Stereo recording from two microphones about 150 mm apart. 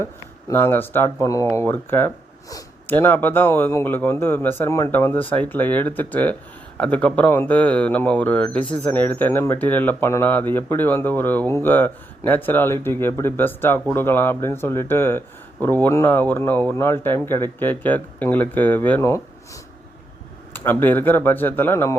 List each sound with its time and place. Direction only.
0.0 s speech: 15° left (ahead or behind)
20.5 s speech: 15° left (ahead or behind)